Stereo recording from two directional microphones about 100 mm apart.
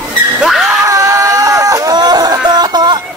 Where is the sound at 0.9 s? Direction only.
30° right (ahead or behind).